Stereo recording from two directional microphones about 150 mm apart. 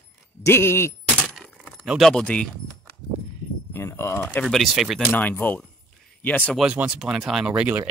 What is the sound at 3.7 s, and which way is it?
Speech, 15° left (ahead or behind).